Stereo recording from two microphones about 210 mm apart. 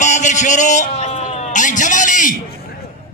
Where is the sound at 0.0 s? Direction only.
35° left (ahead or behind).